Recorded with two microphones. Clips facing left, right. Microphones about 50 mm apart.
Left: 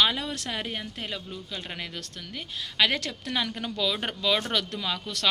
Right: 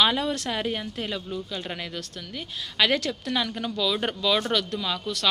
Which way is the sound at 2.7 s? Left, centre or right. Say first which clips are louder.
Right 2 dB; centre.